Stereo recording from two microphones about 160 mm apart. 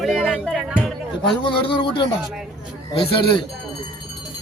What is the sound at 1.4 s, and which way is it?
Speech, 30° left (ahead or behind).